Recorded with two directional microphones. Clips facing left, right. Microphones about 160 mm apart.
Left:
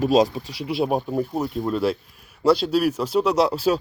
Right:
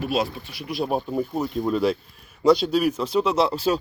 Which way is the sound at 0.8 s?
5° left (ahead or behind).